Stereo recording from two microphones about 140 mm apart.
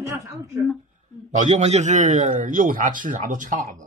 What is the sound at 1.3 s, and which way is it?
A man's voice, 55° right (ahead or behind).